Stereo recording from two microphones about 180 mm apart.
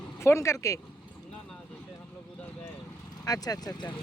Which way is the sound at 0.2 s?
15° left (ahead or behind).